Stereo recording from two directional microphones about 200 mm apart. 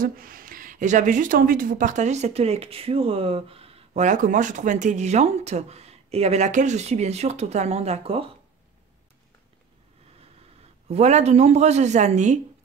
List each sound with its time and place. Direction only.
0.0 s speech: 45° right (ahead or behind); by 8.3 s 30° right (ahead or behind)
10.9 s speech: 35° right (ahead or behind)